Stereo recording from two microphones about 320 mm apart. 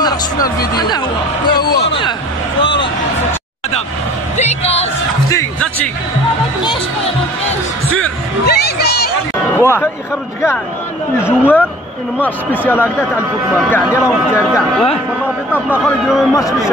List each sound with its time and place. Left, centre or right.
0.0 s speech: centre
1.6 s a sound: centre
4.4 s speech: centre
5.3 s a man's voice: centre
8.5 s music: left
9.6 s speech: centre
11.2 s a man's voice: centre